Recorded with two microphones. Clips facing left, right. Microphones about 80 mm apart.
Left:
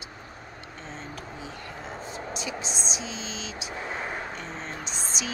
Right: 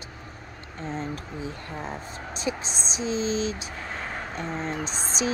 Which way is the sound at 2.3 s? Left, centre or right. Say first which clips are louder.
Right 6 dB; right.